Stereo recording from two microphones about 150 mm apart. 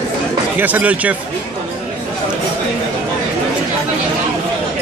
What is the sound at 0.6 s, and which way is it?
Speech, 10° right (ahead or behind).